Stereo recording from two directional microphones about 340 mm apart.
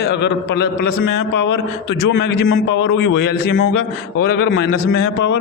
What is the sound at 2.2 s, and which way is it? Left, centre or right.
A man's voice, left.